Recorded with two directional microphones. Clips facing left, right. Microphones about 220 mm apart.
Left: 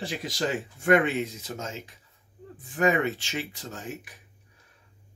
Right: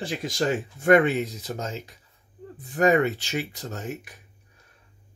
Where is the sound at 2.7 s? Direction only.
40° right (ahead or behind).